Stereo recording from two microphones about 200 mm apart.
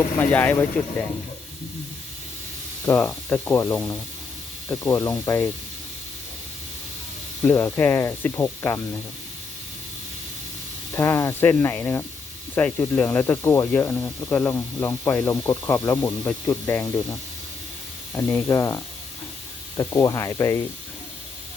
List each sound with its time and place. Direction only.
0.2 s speech: 10° left (ahead or behind)
2.8 s speech: 15° left (ahead or behind)
7.4 s speech: 10° left (ahead or behind)
10.9 s speech: 15° left (ahead or behind)